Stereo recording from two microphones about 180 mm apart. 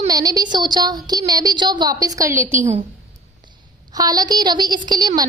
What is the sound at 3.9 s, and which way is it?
A woman's voice, 20° right (ahead or behind).